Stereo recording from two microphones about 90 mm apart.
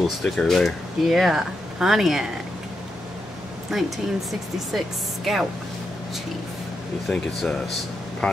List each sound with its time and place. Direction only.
0.0 s speech: 5° left (ahead or behind)
3.7 s speech: centre (ahead or behind)
7.1 s speech: 5° left (ahead or behind)